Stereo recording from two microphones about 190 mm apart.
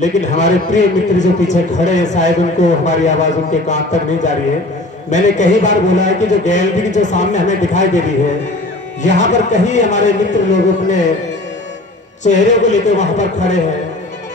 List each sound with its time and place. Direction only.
0.0 s a man's voice: 40° left (ahead or behind)
9.0 s a man's voice: 40° left (ahead or behind)
12.2 s a man's voice: 40° left (ahead or behind)